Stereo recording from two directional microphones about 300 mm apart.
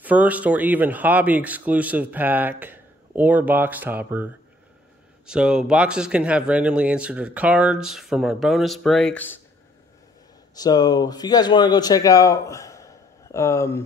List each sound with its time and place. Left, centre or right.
0.0 s speech: centre
10.5 s speech: centre